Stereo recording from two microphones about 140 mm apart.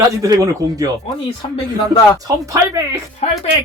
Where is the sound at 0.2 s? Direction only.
25° right (ahead or behind).